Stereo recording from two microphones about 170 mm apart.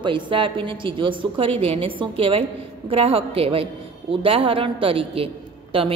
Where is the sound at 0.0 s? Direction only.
30° right (ahead or behind).